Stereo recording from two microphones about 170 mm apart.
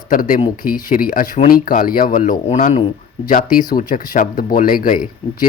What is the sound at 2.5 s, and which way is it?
Speech, 45° left (ahead or behind).